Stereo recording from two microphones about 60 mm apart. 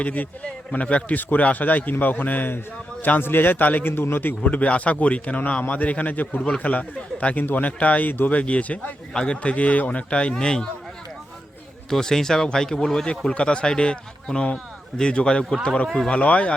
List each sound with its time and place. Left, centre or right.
0.0 s a man's voice: left
4.4 s speech: left
11.9 s speech: centre